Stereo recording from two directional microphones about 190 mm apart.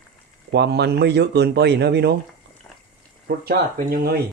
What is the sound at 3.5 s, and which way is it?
Speech, 50° right (ahead or behind).